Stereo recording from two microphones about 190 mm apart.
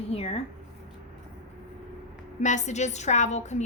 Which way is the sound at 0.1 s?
35° left (ahead or behind).